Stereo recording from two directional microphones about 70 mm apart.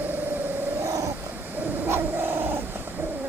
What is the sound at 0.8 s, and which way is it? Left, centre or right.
Cat, right.